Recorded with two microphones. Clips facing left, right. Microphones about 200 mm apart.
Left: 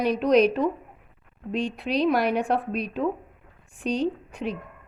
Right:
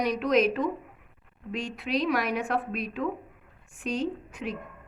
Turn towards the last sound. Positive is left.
turn(degrees=35)  # may be behind; listen again after turning